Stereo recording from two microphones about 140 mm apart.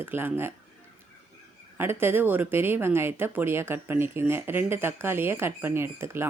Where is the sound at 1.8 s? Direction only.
15° right (ahead or behind).